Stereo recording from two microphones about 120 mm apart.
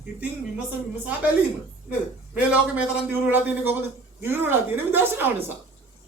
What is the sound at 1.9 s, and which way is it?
A man's voice, 10° right (ahead or behind).